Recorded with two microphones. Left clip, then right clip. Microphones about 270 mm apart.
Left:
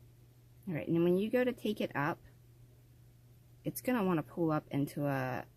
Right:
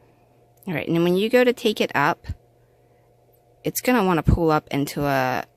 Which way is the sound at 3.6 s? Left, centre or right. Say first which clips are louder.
Right 14 dB; right.